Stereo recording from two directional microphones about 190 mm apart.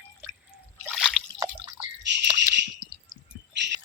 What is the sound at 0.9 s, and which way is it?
Drip, centre (ahead or behind).